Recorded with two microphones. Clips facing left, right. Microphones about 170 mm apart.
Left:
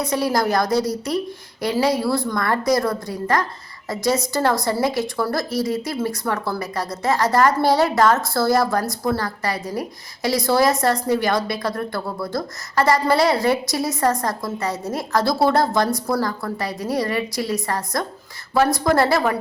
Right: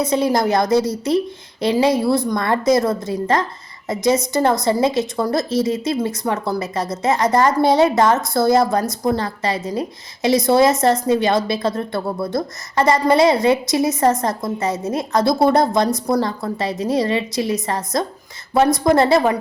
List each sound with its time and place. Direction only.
0.0 s a woman's voice: 20° right (ahead or behind)